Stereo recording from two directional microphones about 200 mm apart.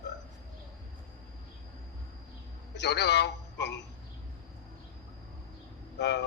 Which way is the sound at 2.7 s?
55° left (ahead or behind).